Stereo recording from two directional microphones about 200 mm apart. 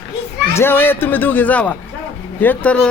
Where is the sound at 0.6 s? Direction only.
10° left (ahead or behind).